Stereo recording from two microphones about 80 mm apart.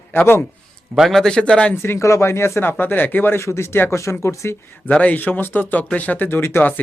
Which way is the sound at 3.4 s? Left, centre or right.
Left.